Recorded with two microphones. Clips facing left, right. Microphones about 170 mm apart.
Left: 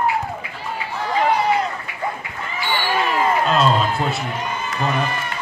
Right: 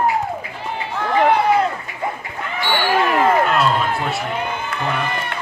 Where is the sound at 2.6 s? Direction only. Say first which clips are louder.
Right 4 dB; 60° right (ahead or behind).